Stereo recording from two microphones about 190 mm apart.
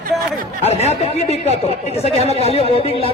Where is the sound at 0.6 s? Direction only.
35° left (ahead or behind).